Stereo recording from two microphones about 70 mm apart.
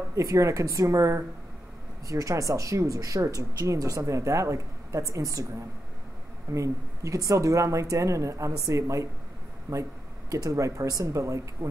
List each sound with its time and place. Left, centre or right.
0.1 s speech: right
6.5 s speech: right